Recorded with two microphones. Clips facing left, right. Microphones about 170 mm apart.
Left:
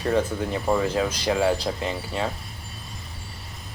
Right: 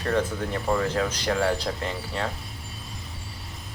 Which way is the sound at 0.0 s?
5° left (ahead or behind).